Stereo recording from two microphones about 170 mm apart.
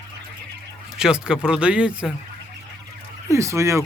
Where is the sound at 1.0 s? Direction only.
5° right (ahead or behind).